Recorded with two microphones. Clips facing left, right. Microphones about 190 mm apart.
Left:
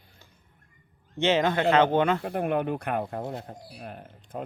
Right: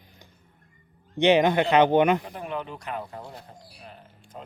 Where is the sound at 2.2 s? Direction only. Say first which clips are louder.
Left 7 dB; 55° left (ahead or behind).